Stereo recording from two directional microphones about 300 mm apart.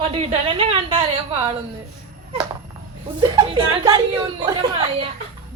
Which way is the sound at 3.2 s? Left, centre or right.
Centre.